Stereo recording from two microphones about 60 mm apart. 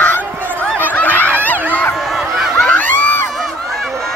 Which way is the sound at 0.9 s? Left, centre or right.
Left.